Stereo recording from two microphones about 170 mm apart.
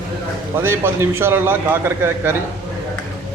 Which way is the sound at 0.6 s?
15° right (ahead or behind).